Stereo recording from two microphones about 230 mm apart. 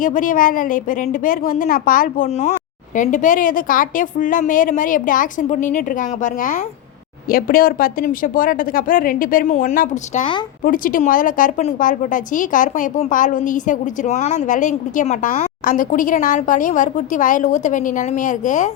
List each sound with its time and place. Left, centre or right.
0.0 s a woman's voice: left